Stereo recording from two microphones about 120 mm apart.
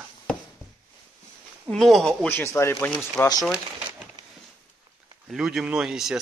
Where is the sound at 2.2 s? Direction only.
20° left (ahead or behind).